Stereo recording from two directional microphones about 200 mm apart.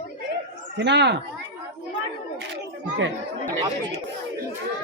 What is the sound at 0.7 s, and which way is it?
Speech, 60° right (ahead or behind).